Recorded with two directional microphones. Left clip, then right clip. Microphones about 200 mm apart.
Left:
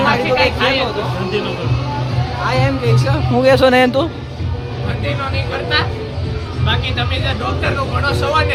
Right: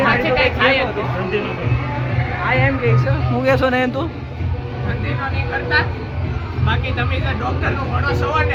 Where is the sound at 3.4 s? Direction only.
20° left (ahead or behind).